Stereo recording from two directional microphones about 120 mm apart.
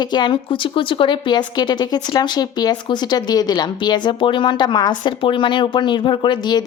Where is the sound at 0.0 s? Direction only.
40° left (ahead or behind).